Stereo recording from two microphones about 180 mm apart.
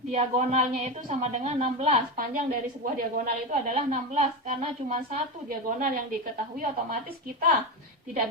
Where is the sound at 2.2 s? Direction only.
50° right (ahead or behind).